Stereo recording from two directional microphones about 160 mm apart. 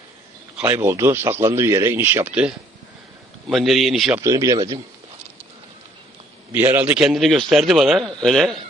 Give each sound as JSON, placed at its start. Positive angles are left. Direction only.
{"t": 0.5, "sound": "a man's voice", "side_deg": -10}
{"t": 4.2, "sound": "speech", "side_deg": -20}
{"t": 6.5, "sound": "a man's voice", "side_deg": -10}